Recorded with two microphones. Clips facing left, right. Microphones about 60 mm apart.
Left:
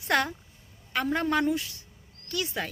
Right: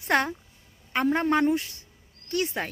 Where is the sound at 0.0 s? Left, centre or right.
Right.